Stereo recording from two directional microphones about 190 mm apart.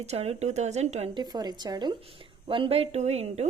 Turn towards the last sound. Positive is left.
turn(degrees=-35)  # may be behind; listen again after turning